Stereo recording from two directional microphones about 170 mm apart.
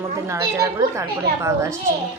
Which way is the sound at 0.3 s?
15° right (ahead or behind).